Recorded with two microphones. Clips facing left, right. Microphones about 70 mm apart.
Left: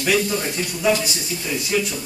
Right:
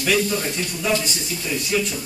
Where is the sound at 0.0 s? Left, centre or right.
Centre.